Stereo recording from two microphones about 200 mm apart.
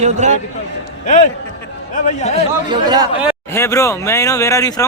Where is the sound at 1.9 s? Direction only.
35° left (ahead or behind).